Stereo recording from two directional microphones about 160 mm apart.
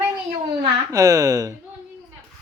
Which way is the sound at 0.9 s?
20° right (ahead or behind).